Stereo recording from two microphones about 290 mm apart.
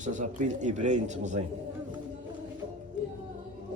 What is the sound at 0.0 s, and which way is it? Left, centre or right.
A man's voice, right.